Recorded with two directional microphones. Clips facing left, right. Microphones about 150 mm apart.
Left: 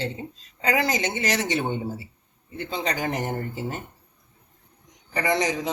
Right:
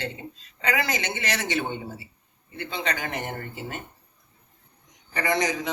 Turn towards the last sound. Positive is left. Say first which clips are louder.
# left 1 dB
turn(degrees=30)  # may be behind; listen again after turning